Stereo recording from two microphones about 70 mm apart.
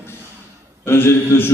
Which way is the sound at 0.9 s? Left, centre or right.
Left.